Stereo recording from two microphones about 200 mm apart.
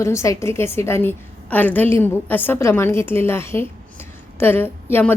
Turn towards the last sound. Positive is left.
turn(degrees=10)  # may be behind; listen again after turning